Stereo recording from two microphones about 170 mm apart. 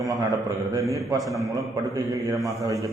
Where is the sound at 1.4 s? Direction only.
20° right (ahead or behind).